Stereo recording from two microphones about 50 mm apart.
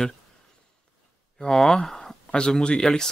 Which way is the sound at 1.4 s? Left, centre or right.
Centre.